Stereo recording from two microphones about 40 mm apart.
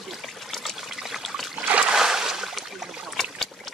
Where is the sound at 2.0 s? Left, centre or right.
Centre.